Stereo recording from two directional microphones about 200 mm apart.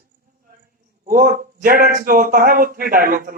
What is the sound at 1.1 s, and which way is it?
A man's voice, 40° right (ahead or behind).